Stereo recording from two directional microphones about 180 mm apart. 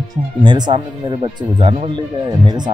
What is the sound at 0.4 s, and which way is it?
Speech, 25° right (ahead or behind).